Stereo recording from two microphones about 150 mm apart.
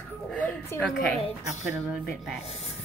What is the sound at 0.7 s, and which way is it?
Speech, 10° left (ahead or behind).